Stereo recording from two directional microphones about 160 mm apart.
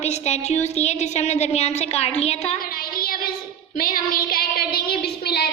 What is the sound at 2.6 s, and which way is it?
Child singing, 65° left (ahead or behind).